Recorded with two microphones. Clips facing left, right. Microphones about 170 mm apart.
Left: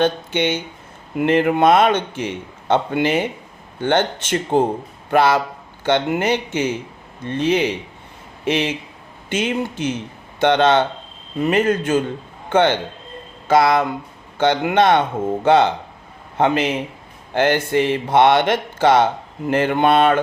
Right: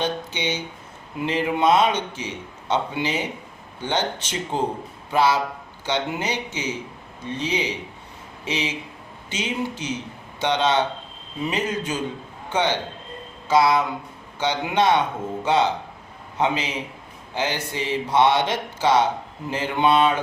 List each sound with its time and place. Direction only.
0.0 s a man's voice: 55° left (ahead or behind)